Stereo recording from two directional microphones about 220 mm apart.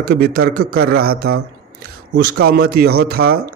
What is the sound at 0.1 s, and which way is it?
Speech, 45° right (ahead or behind).